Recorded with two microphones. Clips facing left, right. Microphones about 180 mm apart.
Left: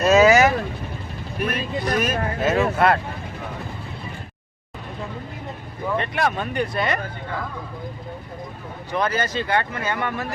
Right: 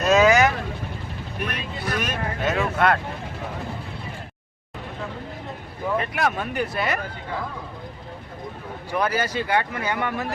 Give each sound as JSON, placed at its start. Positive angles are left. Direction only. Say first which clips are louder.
{"t": 0.0, "sound": "vehicle", "louder": "left 2 dB", "side_deg": 5}
{"t": 1.5, "sound": "speech", "louder": "left 7 dB", "side_deg": 45}
{"t": 2.0, "sound": "speech", "louder": "left 4 dB", "side_deg": 5}
{"t": 6.0, "sound": "speech", "louder": "left 3 dB", "side_deg": -5}
{"t": 8.9, "sound": "speech", "louder": "left 1 dB", "side_deg": -10}